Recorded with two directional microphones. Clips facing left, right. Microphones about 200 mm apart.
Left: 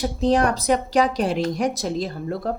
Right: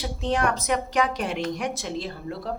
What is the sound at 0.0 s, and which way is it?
A woman's voice, 35° left (ahead or behind).